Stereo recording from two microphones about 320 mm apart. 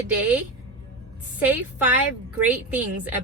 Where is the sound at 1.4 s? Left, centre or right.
Centre.